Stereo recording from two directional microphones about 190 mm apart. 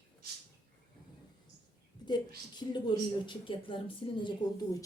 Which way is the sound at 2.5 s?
25° left (ahead or behind).